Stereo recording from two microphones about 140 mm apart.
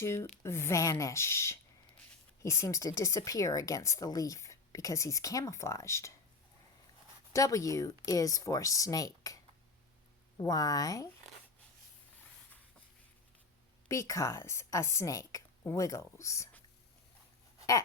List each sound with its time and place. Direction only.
0.0 s speech: 20° left (ahead or behind)
7.3 s speech: 25° left (ahead or behind)
13.8 s speech: 20° left (ahead or behind)